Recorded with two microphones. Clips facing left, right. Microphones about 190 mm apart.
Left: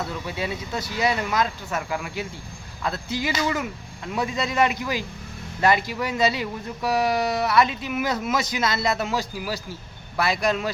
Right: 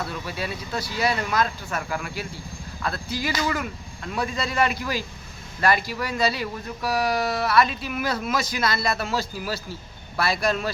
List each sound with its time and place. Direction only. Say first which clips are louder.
0.0 s speech: left 1 dB; 20° left (ahead or behind)